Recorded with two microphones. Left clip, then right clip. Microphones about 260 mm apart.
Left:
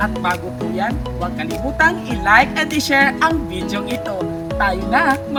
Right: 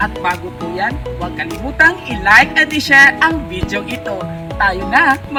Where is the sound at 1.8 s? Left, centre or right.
Centre.